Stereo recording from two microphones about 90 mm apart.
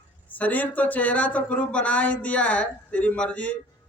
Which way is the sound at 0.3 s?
20° left (ahead or behind).